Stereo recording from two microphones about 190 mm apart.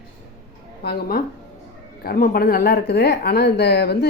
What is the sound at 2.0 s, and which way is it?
A woman's voice, 50° left (ahead or behind).